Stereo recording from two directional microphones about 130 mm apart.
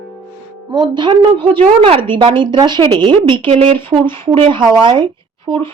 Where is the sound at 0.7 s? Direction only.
35° right (ahead or behind).